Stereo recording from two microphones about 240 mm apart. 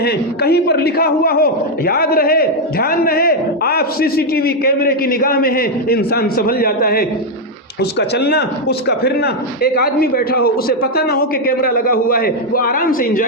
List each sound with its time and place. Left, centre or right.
0.0 s a man's voice: left